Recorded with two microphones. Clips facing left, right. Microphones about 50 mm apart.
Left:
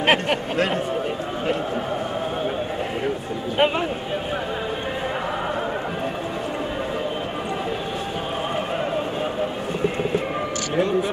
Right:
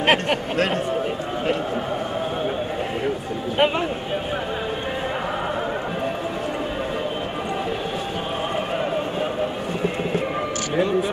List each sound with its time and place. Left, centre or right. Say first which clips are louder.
0.0 s speech: even; centre